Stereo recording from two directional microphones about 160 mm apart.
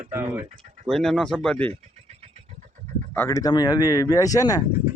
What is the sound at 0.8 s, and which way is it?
Speech, 5° left (ahead or behind).